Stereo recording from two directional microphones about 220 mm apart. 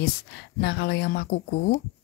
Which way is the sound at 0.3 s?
50° left (ahead or behind).